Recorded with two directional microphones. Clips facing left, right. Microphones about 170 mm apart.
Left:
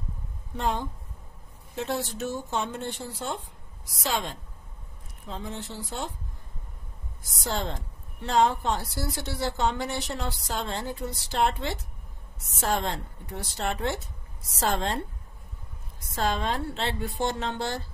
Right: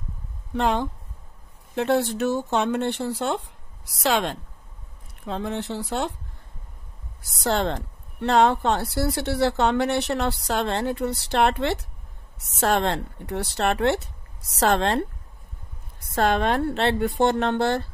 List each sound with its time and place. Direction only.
0.6 s a woman's voice: 75° right (ahead or behind)
1.8 s a woman's voice: 65° right (ahead or behind)
7.4 s a woman's voice: 70° right (ahead or behind)
16.2 s speech: 65° right (ahead or behind)